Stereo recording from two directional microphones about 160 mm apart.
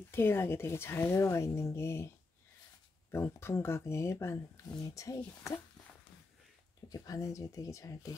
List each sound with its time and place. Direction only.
0.1 s speech: 15° left (ahead or behind)
3.1 s speech: 15° left (ahead or behind)
6.9 s speech: 20° left (ahead or behind)